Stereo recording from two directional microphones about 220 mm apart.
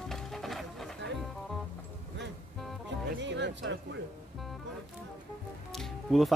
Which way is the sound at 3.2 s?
55° right (ahead or behind).